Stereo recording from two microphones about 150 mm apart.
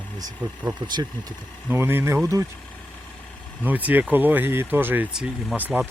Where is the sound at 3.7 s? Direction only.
10° right (ahead or behind).